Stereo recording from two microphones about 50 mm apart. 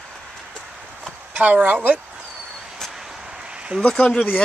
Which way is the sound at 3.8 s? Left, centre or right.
Centre.